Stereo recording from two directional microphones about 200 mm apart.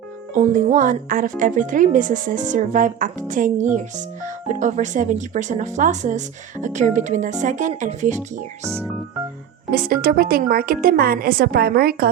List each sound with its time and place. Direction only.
0.3 s speech: 40° right (ahead or behind)
9.7 s a woman's voice: 45° right (ahead or behind)